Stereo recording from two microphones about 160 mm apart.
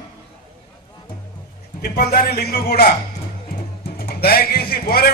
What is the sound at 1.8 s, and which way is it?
Speech, 70° left (ahead or behind).